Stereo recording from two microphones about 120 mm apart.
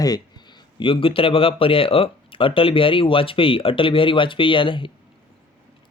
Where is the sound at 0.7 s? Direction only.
45° left (ahead or behind).